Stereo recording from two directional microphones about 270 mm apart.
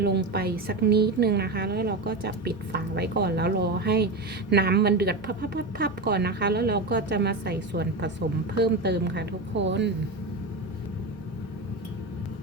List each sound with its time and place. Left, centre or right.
0.0 s a woman's voice: right